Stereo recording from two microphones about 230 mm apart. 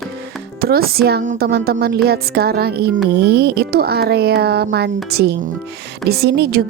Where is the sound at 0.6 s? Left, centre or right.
Right.